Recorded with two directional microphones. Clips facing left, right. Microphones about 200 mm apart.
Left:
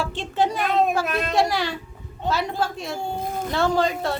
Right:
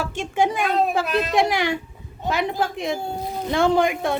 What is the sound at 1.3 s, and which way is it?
A woman's voice, 15° right (ahead or behind).